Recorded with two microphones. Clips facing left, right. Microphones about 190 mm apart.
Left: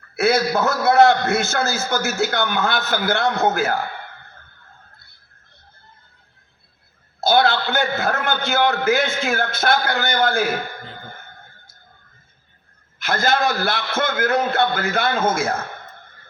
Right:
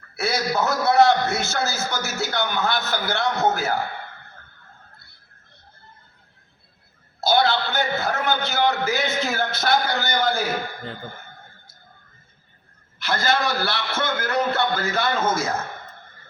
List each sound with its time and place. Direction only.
0.2 s a man's voice: 50° left (ahead or behind)
7.2 s a man's voice: 50° left (ahead or behind)
13.0 s a man's voice: 50° left (ahead or behind)